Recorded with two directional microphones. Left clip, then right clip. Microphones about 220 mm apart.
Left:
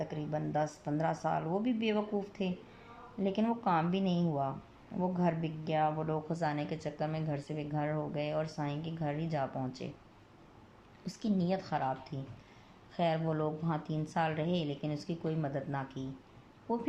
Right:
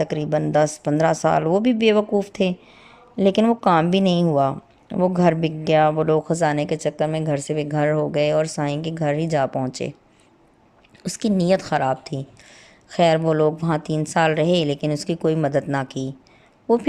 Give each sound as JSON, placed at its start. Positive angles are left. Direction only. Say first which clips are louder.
{"t": 0.0, "sound": "a woman's voice", "louder": "right 16 dB", "side_deg": -45}
{"t": 11.0, "sound": "a woman's voice", "louder": "right 14 dB", "side_deg": -45}